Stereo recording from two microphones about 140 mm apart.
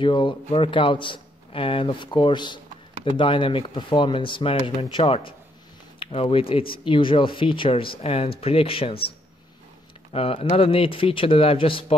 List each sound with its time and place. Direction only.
0.0 s a man's voice: 35° left (ahead or behind)
10.1 s a man's voice: 45° left (ahead or behind)